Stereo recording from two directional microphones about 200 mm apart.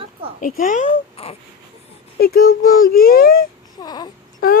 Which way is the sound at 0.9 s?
30° left (ahead or behind).